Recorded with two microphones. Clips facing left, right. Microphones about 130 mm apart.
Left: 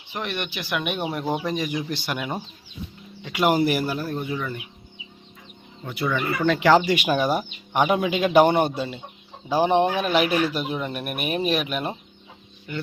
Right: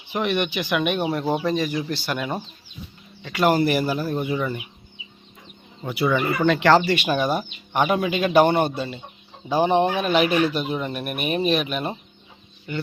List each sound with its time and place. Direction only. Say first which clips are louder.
0.1 s speech: right 7 dB; 5° right (ahead or behind)
1.5 s speech: right 3 dB; 15° left (ahead or behind)
3.6 s speech: right 1 dB; 5° left (ahead or behind)
5.8 s speech: right 4 dB; 5° right (ahead or behind)